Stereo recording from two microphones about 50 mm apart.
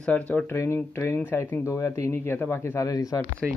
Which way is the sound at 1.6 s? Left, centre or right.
Left.